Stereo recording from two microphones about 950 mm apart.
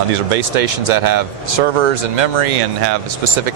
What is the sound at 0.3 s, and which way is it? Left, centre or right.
Speech, right.